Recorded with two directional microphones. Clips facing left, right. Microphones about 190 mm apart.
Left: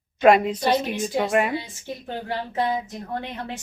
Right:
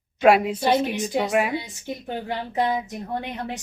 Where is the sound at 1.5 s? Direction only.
15° right (ahead or behind).